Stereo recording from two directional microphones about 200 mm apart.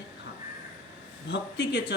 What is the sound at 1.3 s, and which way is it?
Speech, 60° left (ahead or behind).